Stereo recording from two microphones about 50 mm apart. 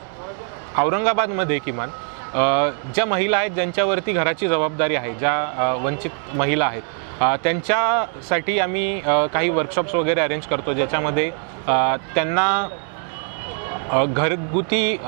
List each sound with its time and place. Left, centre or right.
0.7 s speech: right